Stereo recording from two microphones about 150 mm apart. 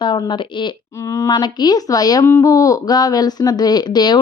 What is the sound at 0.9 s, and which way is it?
Speech, 20° left (ahead or behind).